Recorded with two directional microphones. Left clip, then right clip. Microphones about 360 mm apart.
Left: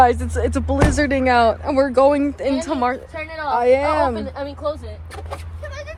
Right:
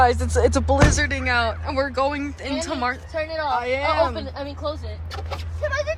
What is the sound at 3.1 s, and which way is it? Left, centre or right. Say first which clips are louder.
Speech: left 1 dB; centre.